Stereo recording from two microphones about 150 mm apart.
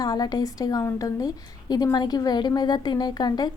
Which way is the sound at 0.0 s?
25° left (ahead or behind).